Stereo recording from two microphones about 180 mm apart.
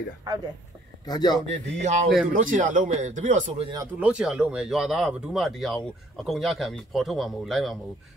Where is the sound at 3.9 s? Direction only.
5° right (ahead or behind).